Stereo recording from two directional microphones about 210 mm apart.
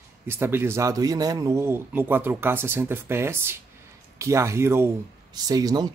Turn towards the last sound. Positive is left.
turn(degrees=-20)  # may be behind; listen again after turning